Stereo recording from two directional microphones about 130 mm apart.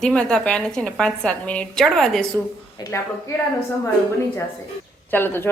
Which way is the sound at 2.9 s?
20° left (ahead or behind).